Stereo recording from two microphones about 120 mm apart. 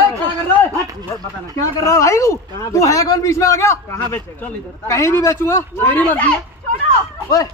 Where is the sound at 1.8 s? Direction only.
25° left (ahead or behind).